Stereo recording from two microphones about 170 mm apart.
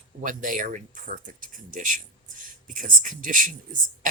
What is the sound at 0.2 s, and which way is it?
Speech, 50° right (ahead or behind).